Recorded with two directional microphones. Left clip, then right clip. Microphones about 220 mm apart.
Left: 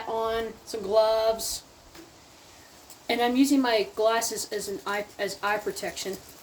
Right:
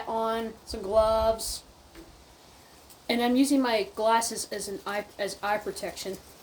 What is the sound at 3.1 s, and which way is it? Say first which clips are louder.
A woman's voice: left 1 dB; 5° right (ahead or behind).